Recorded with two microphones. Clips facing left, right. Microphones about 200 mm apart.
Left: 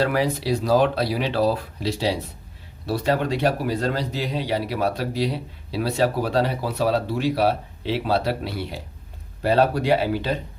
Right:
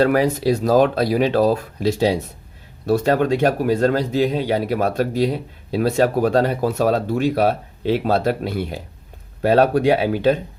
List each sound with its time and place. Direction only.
0.0 s speech: 50° right (ahead or behind)